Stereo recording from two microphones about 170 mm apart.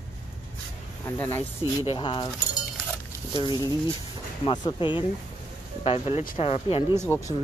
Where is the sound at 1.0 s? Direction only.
10° left (ahead or behind).